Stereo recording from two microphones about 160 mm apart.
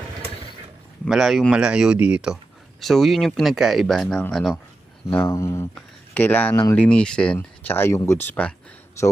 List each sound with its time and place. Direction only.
1.0 s speech: centre (ahead or behind)
5.1 s speech: 15° left (ahead or behind)